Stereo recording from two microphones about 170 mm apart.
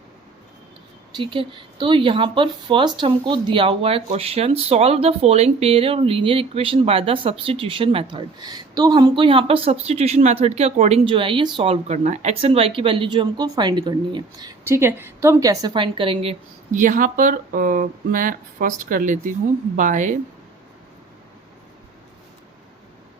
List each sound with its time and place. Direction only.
1.1 s speech: 30° right (ahead or behind)
16.7 s speech: 50° right (ahead or behind)